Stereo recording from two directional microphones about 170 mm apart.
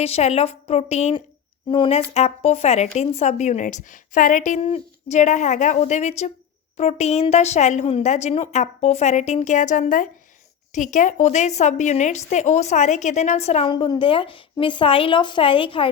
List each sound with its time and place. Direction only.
0.0 s a woman's voice: 40° left (ahead or behind)
13.7 s a woman's voice: 30° left (ahead or behind)